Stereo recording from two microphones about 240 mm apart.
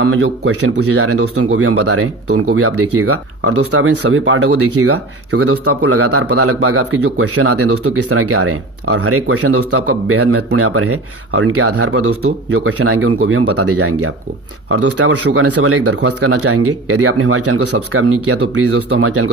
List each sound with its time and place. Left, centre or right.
0.0 s speech: right
4.0 s speech: right